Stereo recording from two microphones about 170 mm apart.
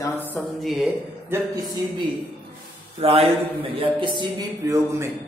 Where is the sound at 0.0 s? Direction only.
10° left (ahead or behind).